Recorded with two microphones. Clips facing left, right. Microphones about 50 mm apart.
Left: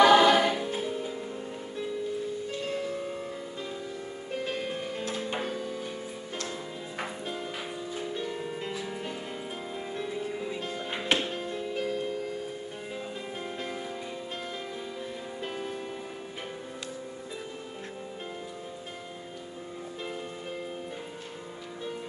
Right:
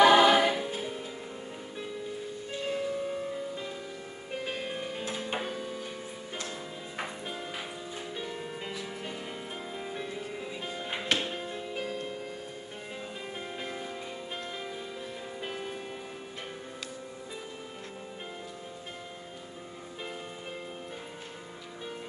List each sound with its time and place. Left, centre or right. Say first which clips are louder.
0.0 s choir: left 1 dB; centre
0.8 s music: left 5 dB; centre
2.5 s music: right 5 dB; centre
4.3 s music: left 2 dB; centre
7.9 s music: left 5 dB; centre
9.8 s music: left 6 dB; centre
13.6 s music: left 2 dB; centre
15.4 s music: left 2 dB; centre